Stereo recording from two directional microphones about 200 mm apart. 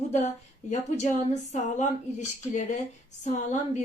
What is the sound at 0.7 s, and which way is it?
A woman's voice, 35° left (ahead or behind).